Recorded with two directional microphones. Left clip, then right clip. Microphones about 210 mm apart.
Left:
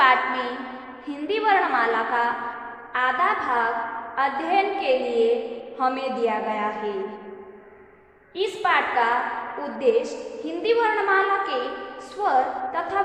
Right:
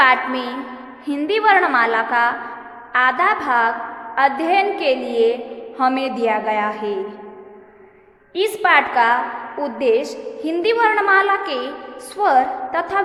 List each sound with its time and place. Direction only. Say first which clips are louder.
0.0 s a sound: right 4 dB; 40° right (ahead or behind)
1.0 s a woman's voice: right 7 dB; 45° right (ahead or behind)
8.4 s a woman's voice: right 7 dB; 45° right (ahead or behind)